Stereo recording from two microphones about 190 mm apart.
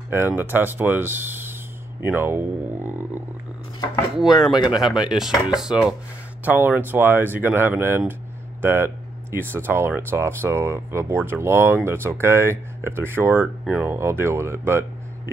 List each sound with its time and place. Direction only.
0.4 s speech: 10° right (ahead or behind)
4.2 s speech: centre (ahead or behind)